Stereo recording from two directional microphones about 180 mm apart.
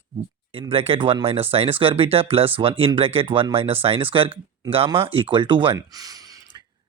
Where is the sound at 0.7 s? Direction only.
30° right (ahead or behind).